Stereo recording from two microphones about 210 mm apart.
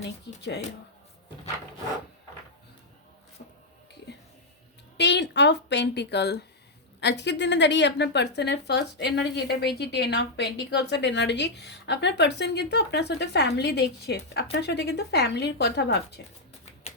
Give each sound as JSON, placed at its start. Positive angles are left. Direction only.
{"t": 0.0, "sound": "speech", "side_deg": 55}
{"t": 4.1, "sound": "music", "side_deg": 55}
{"t": 4.9, "sound": "speech", "side_deg": 55}